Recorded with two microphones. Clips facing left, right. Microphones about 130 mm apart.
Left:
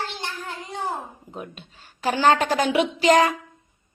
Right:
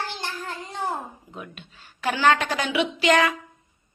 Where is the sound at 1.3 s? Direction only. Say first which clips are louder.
Left 3 dB; 40° left (ahead or behind).